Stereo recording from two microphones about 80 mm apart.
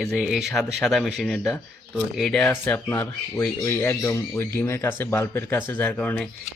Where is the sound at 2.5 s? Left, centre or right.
Left.